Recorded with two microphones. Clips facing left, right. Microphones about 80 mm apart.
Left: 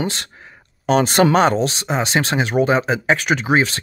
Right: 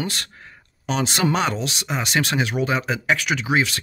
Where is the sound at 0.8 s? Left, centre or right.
Left.